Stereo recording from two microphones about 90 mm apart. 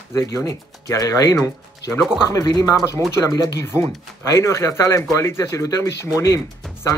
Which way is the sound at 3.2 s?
30° left (ahead or behind).